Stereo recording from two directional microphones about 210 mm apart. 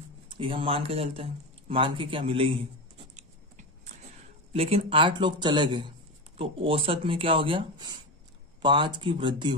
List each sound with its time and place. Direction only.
0.3 s speech: 25° right (ahead or behind)
3.2 s a sound: 35° right (ahead or behind)
4.5 s speech: 30° right (ahead or behind)